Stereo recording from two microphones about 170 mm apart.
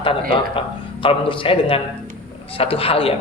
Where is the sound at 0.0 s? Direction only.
30° left (ahead or behind).